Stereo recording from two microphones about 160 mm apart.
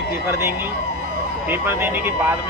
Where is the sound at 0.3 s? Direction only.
15° right (ahead or behind).